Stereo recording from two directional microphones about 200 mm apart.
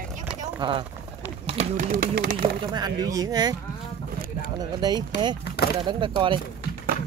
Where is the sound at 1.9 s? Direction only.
45° right (ahead or behind).